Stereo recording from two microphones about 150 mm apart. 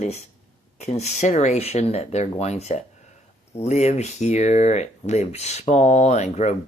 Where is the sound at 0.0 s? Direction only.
45° left (ahead or behind).